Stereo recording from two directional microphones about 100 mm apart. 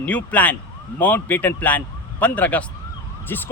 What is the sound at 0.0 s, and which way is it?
Speech, 15° left (ahead or behind).